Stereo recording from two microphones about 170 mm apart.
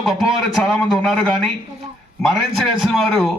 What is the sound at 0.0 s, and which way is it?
A man's voice, centre (ahead or behind).